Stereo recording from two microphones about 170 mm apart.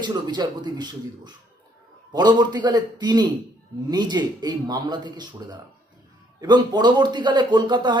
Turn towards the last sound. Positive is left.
turn(degrees=-25)  # may be behind; listen again after turning